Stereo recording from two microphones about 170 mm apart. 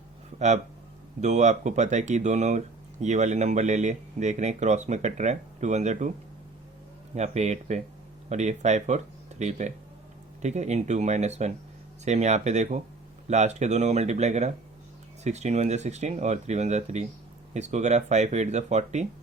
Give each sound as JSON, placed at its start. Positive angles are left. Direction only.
{"t": 0.3, "sound": "speech", "side_deg": -45}
{"t": 7.2, "sound": "speech", "side_deg": -40}